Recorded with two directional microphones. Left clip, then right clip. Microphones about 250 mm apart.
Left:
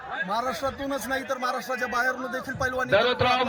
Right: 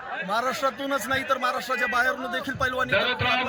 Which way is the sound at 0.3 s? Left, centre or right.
Centre.